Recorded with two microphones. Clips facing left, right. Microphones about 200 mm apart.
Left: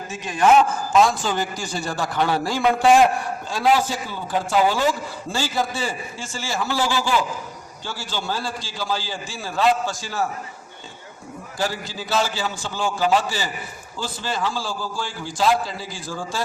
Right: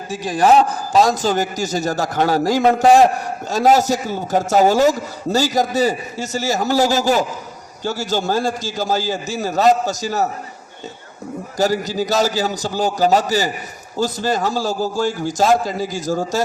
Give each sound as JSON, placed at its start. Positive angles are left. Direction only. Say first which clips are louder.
{"t": 0.1, "sound": "a man's voice", "louder": "right 3 dB", "side_deg": -35}
{"t": 11.5, "sound": "a man's voice", "louder": "right 9 dB", "side_deg": -40}